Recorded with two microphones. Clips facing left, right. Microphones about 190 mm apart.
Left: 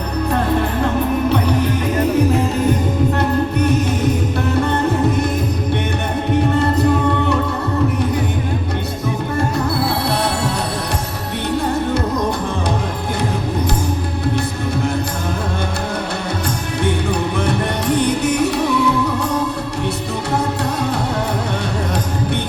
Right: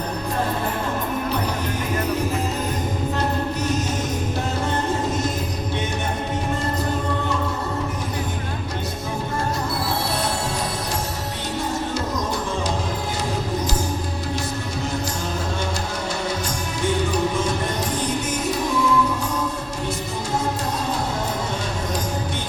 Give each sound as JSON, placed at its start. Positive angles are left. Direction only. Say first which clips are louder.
{"t": 4.6, "sound": "music", "louder": "left 6 dB", "side_deg": 60}
{"t": 9.8, "sound": "music", "louder": "left 6 dB", "side_deg": 65}
{"t": 16.8, "sound": "music", "louder": "left 2 dB", "side_deg": 60}